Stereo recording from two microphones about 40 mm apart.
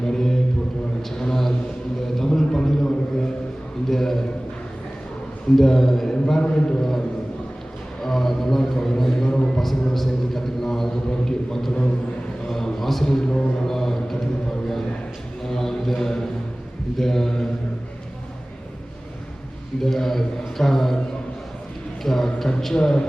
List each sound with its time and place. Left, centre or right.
0.0 s a sound: centre
5.5 s a man's voice: centre
6.4 s a man's voice: left
8.0 s a man's voice: centre
15.4 s mantra: centre
17.0 s a man's voice: centre
19.8 s a man's voice: centre
22.0 s music: centre
22.7 s a man's voice: centre